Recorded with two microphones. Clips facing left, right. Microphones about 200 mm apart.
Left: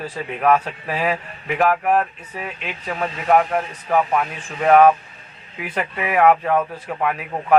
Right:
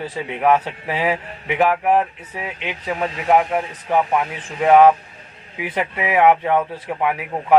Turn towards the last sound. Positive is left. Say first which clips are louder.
# right 1 dB
turn(degrees=-15)  # may be behind; listen again after turning